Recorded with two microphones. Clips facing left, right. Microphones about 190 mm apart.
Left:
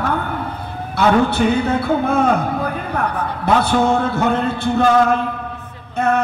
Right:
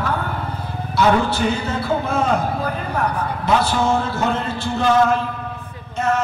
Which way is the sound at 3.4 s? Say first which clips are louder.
Left 3 dB; 60° left (ahead or behind).